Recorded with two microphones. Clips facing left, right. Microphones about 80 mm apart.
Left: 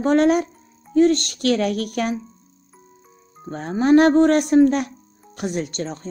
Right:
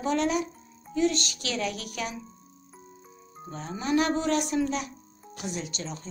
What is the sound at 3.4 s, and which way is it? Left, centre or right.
Speech, left.